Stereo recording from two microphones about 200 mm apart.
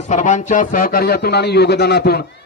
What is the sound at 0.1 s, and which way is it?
A man's voice, 40° left (ahead or behind).